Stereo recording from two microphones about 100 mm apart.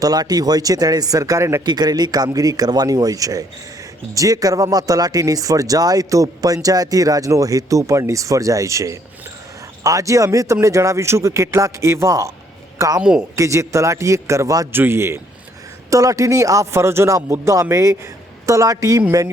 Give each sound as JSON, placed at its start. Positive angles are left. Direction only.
{"t": 0.0, "sound": "speech", "side_deg": -40}
{"t": 1.6, "sound": "speech", "side_deg": -45}
{"t": 13.0, "sound": "speech", "side_deg": -10}
{"t": 13.3, "sound": "speech", "side_deg": -30}
{"t": 14.7, "sound": "a man's voice", "side_deg": -20}